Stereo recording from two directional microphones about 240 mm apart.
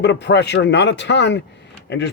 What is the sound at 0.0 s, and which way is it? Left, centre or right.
Speech, left.